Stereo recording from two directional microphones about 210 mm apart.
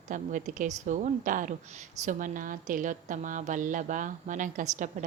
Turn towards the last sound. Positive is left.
turn(degrees=-35)  # may be behind; listen again after turning